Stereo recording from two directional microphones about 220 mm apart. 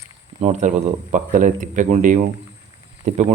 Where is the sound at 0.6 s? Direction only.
35° right (ahead or behind).